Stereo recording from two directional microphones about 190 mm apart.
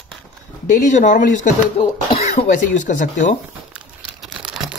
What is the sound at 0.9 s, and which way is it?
Speech, 40° left (ahead or behind).